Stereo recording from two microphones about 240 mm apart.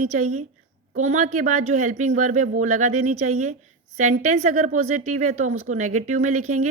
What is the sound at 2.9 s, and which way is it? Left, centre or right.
Speech, right.